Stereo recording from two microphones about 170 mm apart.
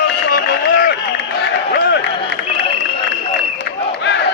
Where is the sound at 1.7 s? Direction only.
80° left.